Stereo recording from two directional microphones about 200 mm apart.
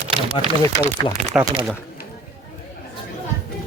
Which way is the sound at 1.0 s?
25° left (ahead or behind).